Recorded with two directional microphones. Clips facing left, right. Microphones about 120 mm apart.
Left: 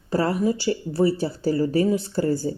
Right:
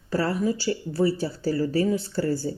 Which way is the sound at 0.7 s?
35° left (ahead or behind).